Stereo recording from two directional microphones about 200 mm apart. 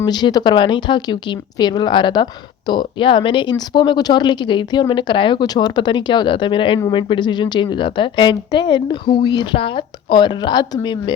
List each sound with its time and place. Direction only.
0.0 s a woman's voice: 20° left (ahead or behind)